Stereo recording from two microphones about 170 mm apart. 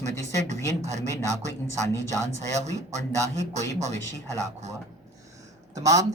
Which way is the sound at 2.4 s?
40° right (ahead or behind).